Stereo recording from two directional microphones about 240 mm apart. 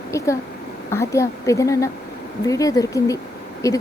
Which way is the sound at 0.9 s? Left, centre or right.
Centre.